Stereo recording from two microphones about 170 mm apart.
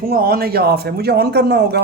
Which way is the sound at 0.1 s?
60° right (ahead or behind).